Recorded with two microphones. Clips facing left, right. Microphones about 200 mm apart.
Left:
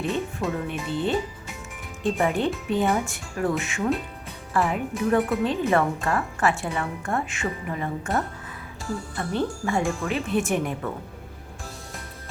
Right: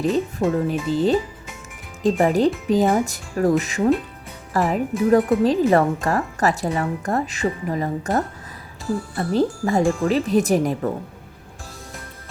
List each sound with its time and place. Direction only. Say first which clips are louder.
0.0 s a woman's voice: right 6 dB; 35° right (ahead or behind)